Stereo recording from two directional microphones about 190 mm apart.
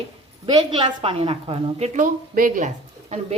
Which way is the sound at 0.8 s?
30° right (ahead or behind).